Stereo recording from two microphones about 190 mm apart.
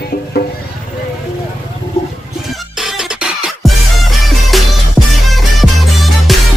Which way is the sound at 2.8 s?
Centre (ahead or behind).